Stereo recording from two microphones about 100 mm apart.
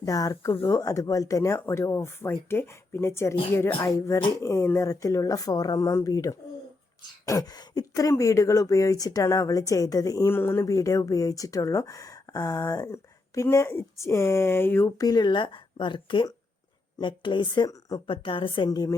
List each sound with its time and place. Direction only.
0.0 s speech: 35° left (ahead or behind)
7.3 s a sound: 35° left (ahead or behind)
8.1 s speech: 30° left (ahead or behind)
14.9 s speech: 40° left (ahead or behind)
17.7 s speech: 35° left (ahead or behind)
18.0 s a woman's voice: 60° left (ahead or behind)
18.7 s speech: 40° left (ahead or behind)